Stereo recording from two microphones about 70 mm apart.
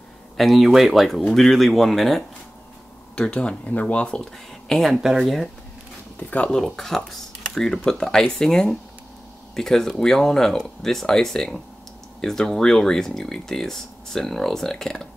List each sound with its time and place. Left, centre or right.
0.4 s speech: centre
3.2 s speech: centre
4.2 s speech: centre
6.1 s speech: centre
6.5 s speech: centre